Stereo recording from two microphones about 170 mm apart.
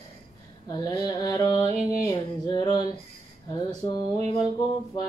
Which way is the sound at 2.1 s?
25° left (ahead or behind).